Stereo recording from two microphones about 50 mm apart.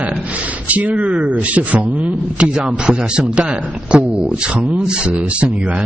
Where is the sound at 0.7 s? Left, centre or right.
Right.